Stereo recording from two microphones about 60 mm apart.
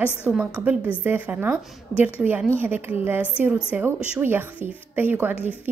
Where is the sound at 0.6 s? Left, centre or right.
Right.